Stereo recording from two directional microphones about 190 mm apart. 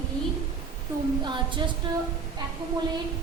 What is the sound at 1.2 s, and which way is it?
Speech, 25° right (ahead or behind).